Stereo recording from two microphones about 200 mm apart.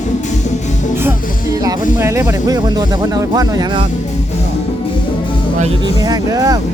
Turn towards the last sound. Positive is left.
turn(degrees=-20)  # may be behind; listen again after turning